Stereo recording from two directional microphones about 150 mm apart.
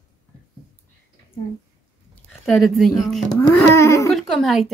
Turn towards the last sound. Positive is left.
turn(degrees=0)  # may be behind; listen again after turning